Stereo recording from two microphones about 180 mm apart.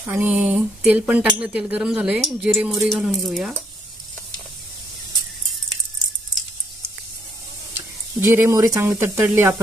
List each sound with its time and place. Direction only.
0.0 s speech: 10° right (ahead or behind)
8.2 s speech: 15° right (ahead or behind)